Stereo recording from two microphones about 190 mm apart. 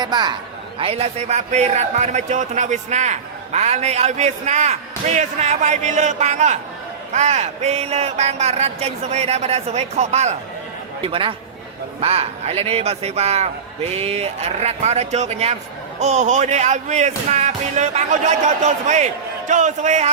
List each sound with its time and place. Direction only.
0.0 s a man's voice: 20° right (ahead or behind); by 20.1 s 40° right (ahead or behind)